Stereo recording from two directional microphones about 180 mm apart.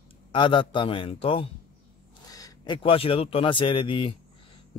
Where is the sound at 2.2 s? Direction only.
20° left (ahead or behind).